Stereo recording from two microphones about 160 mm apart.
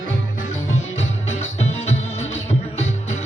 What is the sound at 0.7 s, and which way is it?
Music, 40° left (ahead or behind).